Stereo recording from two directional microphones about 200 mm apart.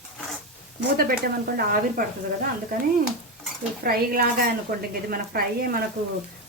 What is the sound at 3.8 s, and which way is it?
Speech, 50° right (ahead or behind).